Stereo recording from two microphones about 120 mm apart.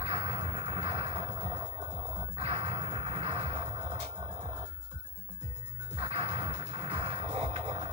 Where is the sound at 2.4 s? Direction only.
55° right (ahead or behind).